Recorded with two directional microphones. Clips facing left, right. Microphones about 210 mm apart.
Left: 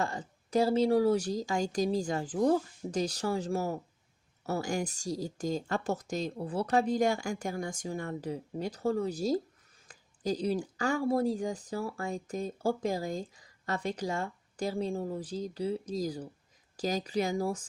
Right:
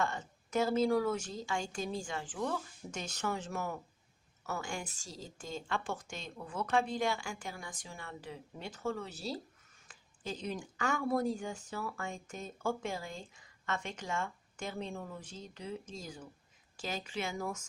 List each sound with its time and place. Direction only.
0.0 s speech: 35° left (ahead or behind)